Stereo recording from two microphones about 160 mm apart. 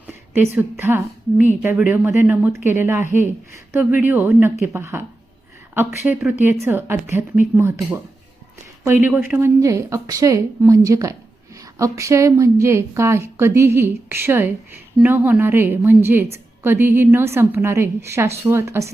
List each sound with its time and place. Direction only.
0.1 s a woman's voice: 10° right (ahead or behind)